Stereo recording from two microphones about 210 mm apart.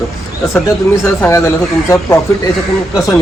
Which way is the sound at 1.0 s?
15° left (ahead or behind).